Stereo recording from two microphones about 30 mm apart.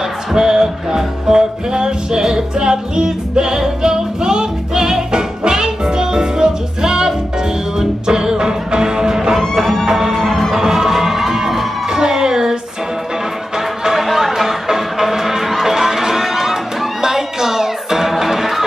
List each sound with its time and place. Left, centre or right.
0.3 s music: centre
9.6 s music: centre
12.0 s music: right
13.9 s chatter: centre
14.7 s music: centre